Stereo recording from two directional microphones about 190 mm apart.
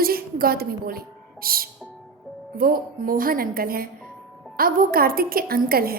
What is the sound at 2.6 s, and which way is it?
A woman's voice, 50° right (ahead or behind).